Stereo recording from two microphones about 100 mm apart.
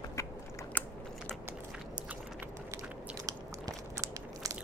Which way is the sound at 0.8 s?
15° left (ahead or behind).